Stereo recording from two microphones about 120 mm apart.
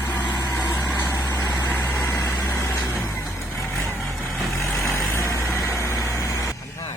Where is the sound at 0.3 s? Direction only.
30° left (ahead or behind).